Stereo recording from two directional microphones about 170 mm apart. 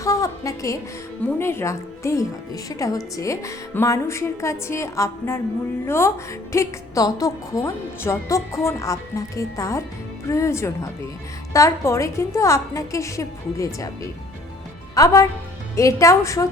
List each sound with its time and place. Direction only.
0.0 s a woman's voice: 20° left (ahead or behind)